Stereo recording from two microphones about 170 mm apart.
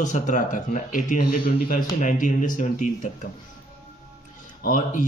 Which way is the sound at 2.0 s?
50° left (ahead or behind).